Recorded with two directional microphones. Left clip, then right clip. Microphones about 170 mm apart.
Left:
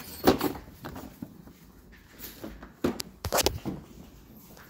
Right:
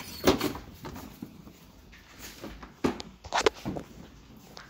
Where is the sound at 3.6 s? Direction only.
45° right (ahead or behind).